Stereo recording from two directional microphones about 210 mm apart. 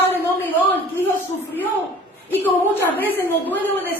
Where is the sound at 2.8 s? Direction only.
10° left (ahead or behind).